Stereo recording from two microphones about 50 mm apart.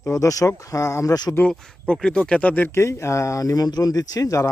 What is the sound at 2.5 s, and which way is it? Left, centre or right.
Speech, left.